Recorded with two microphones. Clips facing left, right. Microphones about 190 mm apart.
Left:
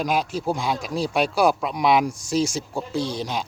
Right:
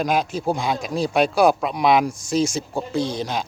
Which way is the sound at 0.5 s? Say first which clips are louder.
Right 2 dB; 5° left (ahead or behind).